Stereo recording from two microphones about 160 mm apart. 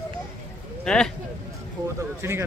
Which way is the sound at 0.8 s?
5° left (ahead or behind).